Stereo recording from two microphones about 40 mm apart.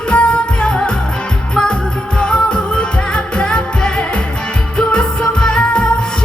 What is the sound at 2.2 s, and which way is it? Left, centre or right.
Music, left.